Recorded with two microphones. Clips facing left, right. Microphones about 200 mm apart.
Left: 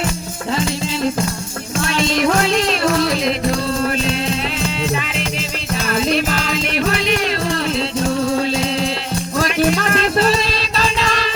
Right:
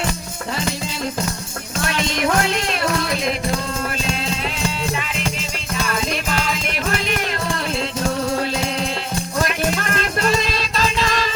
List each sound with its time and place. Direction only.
5.9 s music: 35° left (ahead or behind)
9.9 s music: 35° left (ahead or behind)
10.4 s music: 45° right (ahead or behind)